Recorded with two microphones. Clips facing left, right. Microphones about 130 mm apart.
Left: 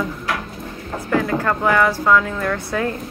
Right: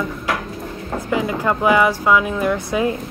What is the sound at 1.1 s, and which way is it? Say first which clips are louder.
Speech: left 1 dB; 15° right (ahead or behind).